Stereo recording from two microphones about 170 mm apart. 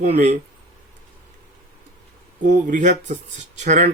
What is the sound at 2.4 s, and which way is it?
Speech, 50° right (ahead or behind).